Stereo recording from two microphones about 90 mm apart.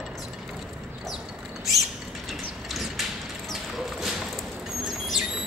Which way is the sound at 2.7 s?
Centre (ahead or behind).